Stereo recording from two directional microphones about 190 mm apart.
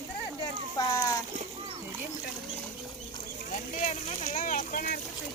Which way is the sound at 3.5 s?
40° left (ahead or behind).